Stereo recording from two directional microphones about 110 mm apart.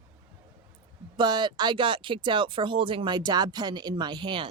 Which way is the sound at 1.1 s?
45° right (ahead or behind).